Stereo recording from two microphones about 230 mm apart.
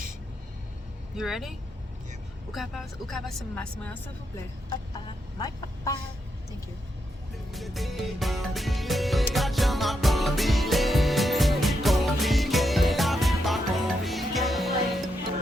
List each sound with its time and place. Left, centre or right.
1.1 s speech: centre
5.4 s speech: centre
7.5 s music: centre